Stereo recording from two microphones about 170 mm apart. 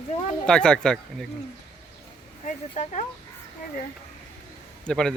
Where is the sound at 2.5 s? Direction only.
45° left (ahead or behind).